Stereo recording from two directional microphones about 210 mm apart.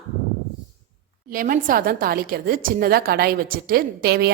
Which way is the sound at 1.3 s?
40° right (ahead or behind).